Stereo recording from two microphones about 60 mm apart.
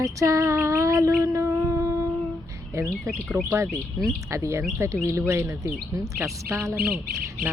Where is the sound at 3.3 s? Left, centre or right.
Right.